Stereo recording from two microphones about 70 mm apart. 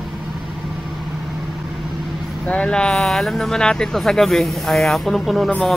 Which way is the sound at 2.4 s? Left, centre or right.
Centre.